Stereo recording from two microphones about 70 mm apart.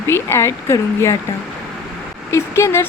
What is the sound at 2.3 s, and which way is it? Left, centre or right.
Speech, left.